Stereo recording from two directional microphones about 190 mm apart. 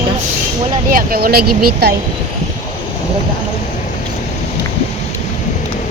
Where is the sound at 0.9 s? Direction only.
50° right (ahead or behind).